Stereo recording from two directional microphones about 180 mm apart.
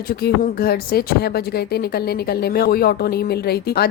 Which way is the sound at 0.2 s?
60° left (ahead or behind).